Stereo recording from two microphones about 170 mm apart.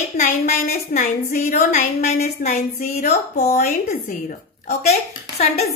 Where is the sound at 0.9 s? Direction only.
45° left (ahead or behind).